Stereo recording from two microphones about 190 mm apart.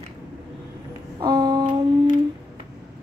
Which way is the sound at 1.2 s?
20° right (ahead or behind).